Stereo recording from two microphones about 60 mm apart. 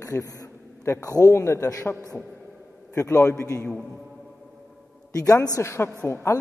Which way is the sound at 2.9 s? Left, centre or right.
Left.